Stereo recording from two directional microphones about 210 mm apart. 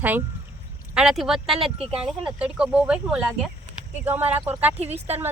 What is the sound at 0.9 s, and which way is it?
Speech, centre (ahead or behind).